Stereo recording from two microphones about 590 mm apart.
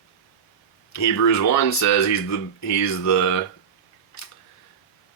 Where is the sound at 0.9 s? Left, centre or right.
Left.